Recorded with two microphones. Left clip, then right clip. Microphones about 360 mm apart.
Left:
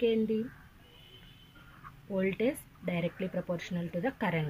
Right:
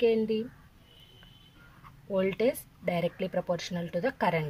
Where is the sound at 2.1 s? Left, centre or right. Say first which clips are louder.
Right 4 dB; right.